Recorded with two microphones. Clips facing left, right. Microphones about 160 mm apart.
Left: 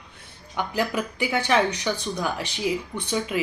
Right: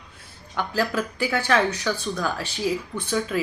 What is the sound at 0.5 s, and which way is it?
Speech, 15° left (ahead or behind).